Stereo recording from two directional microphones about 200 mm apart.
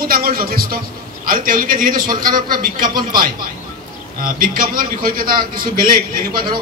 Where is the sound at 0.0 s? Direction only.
45° right (ahead or behind).